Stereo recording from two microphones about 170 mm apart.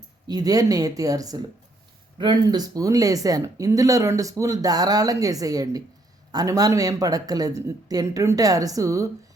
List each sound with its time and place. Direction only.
0.3 s speech: 20° right (ahead or behind)